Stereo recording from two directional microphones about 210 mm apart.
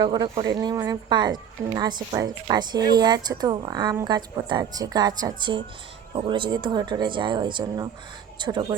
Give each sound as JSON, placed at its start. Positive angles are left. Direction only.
{"t": 0.0, "sound": "speech", "side_deg": -20}